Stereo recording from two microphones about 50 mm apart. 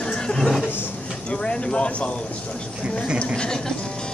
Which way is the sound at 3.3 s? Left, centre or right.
Centre.